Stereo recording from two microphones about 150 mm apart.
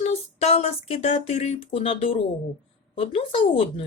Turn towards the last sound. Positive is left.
turn(degrees=35)  # may be behind; listen again after turning